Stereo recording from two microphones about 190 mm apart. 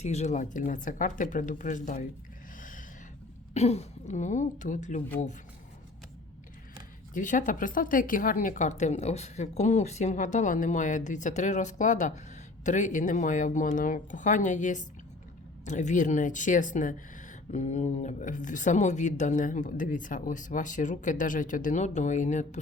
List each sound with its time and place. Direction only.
0.0 s speech: 35° left (ahead or behind)
2.6 s a sound: 45° left (ahead or behind)
3.5 s speech: 35° left (ahead or behind)
7.1 s speech: 45° left (ahead or behind)